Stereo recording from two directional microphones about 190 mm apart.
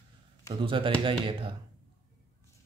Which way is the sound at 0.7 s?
25° right (ahead or behind).